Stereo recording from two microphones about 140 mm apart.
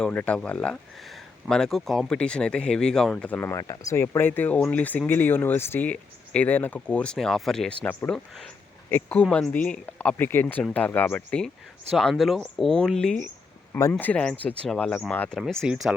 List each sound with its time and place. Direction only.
0.0 s speech: 10° left (ahead or behind)
3.5 s speech: 25° left (ahead or behind)
15.4 s speech: 5° right (ahead or behind)